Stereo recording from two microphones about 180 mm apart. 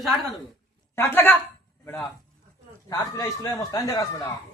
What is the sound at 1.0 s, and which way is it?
A man's voice, 15° left (ahead or behind).